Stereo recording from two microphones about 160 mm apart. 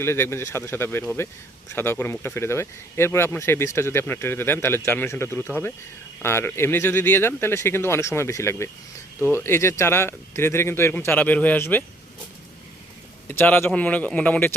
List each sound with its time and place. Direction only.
0.0 s speech: 15° left (ahead or behind)
13.2 s speech: 10° left (ahead or behind)